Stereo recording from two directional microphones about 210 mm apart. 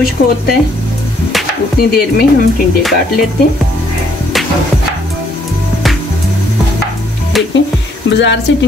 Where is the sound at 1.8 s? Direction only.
45° left (ahead or behind).